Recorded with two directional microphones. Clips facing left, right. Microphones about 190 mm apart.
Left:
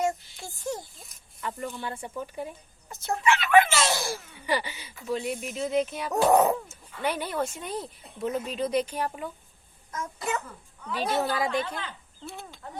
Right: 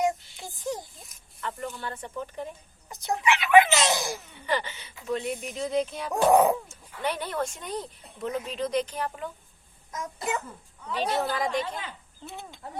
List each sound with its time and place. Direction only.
0.0 s a sound: 15° right (ahead or behind)
1.4 s speech: 10° left (ahead or behind)
2.9 s speech: 15° right (ahead or behind)
4.4 s speech: 10° left (ahead or behind)
6.2 s speech: 10° right (ahead or behind)
7.0 s speech: 10° left (ahead or behind)
9.9 s speech: 15° right (ahead or behind)
10.9 s speech: 5° left (ahead or behind)
12.2 s speech: 20° right (ahead or behind)